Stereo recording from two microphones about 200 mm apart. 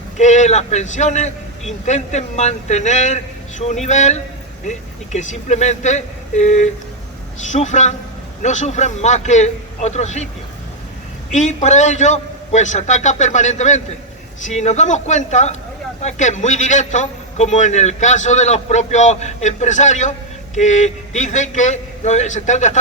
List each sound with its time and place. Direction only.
0.2 s a man's voice: 35° left (ahead or behind)
11.3 s a man's voice: 35° left (ahead or behind)